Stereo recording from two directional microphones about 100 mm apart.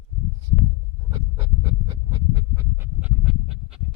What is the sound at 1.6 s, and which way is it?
Writing, 50° right (ahead or behind).